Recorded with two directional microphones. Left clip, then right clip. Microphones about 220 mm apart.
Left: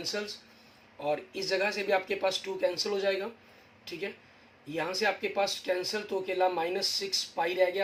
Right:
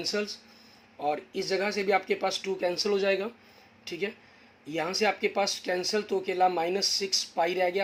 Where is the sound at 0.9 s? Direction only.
45° right (ahead or behind).